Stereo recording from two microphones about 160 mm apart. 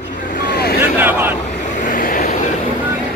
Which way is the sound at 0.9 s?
10° right (ahead or behind).